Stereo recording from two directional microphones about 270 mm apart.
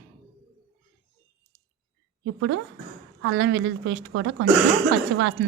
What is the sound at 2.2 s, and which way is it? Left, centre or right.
A woman's voice, right.